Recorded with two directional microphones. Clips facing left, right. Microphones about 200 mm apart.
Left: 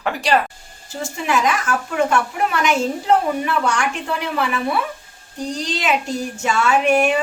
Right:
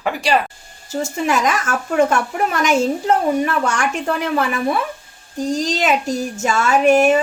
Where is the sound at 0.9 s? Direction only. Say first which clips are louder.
Right 3 dB; 45° right (ahead or behind).